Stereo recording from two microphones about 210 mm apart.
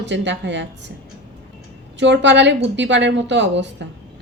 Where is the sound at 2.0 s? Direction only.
60° right (ahead or behind).